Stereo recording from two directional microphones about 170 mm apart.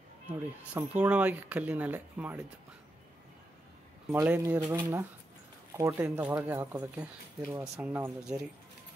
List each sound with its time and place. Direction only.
0.3 s speech: 10° right (ahead or behind)
4.1 s speech: 10° right (ahead or behind)
5.8 s speech: 15° right (ahead or behind)